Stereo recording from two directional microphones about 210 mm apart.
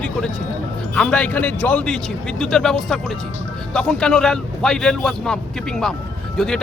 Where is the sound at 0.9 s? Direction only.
5° left (ahead or behind).